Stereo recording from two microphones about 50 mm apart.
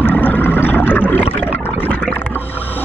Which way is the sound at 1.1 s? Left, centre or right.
Left.